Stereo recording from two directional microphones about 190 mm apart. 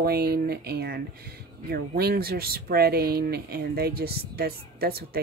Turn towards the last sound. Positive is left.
turn(degrees=-55)  # may be behind; listen again after turning